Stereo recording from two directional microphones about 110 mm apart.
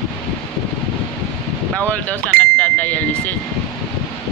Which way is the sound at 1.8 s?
15° left (ahead or behind).